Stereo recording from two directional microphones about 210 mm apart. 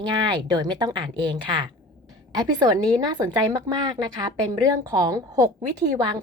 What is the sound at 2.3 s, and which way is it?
A woman's voice, 20° right (ahead or behind).